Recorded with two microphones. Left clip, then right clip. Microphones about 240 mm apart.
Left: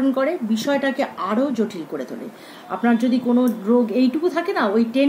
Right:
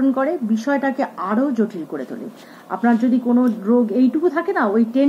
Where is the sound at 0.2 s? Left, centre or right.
Left.